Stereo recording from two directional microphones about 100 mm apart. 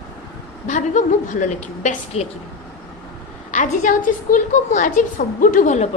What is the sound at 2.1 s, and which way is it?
Speech, 90° left.